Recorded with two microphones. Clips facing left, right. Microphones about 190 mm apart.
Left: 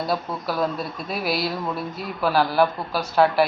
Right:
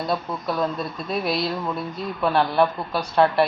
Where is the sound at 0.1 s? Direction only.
5° left (ahead or behind).